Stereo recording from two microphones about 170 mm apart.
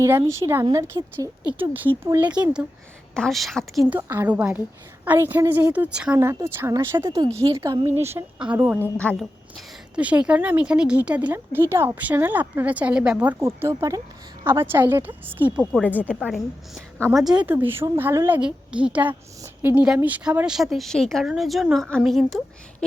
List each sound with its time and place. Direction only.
0.0 s a woman's voice: 15° right (ahead or behind); by 3.8 s centre (ahead or behind)
3.8 s a woman's voice: 10° right (ahead or behind)
8.8 s a woman's voice: 5° left (ahead or behind); by 15.6 s 10° right (ahead or behind)
15.7 s a woman's voice: 10° left (ahead or behind)